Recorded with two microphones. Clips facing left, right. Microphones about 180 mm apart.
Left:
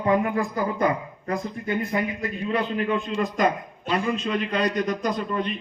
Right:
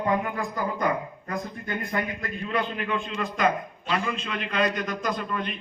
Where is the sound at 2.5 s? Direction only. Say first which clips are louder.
Left 4 dB; 35° left (ahead or behind).